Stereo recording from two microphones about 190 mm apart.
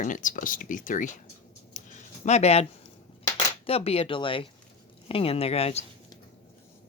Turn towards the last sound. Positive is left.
turn(degrees=30)  # may be behind; listen again after turning